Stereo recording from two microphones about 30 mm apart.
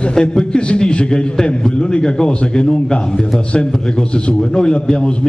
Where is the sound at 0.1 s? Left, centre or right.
Left.